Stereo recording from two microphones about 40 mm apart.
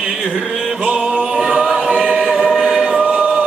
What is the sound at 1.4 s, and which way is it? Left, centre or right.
Choir, centre.